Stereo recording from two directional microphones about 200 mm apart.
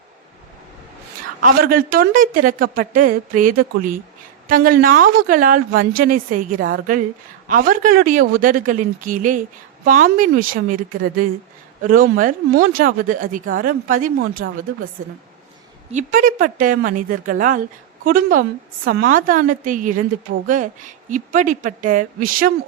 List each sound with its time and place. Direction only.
1.4 s a woman's voice: 45° right (ahead or behind)
14.4 s speech: 55° right (ahead or behind)
15.0 s a woman's voice: 45° right (ahead or behind)